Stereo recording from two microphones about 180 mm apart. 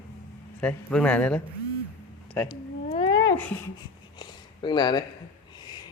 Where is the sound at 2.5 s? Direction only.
25° left (ahead or behind).